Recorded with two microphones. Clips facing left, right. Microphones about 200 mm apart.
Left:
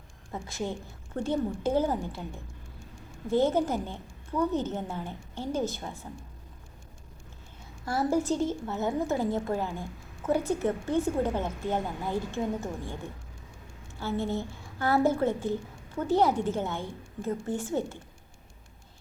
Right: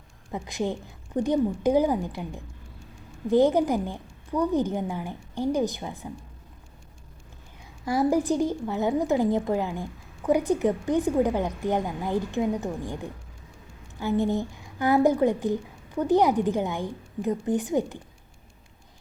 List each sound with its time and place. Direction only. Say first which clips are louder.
0.3 s a woman's voice: right 5 dB; 15° right (ahead or behind)
3.2 s a woman's voice: right 5 dB; 15° right (ahead or behind)
7.9 s a woman's voice: right 4 dB; 15° right (ahead or behind)
14.0 s a woman's voice: right 6 dB; 15° right (ahead or behind)